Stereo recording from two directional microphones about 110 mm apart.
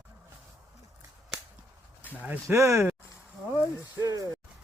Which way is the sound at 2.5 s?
25° right (ahead or behind).